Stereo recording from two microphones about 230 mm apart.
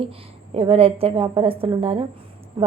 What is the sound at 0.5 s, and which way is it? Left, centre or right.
A woman's voice, right.